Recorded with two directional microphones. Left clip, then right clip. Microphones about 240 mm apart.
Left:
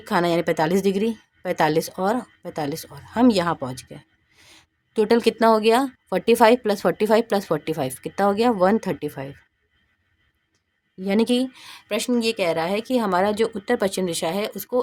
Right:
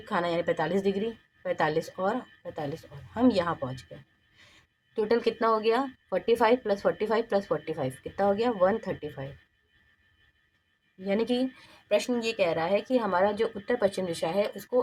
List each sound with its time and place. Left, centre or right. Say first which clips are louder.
0.0 s a woman's voice: left 7 dB; left
11.0 s a woman's voice: left 6 dB; left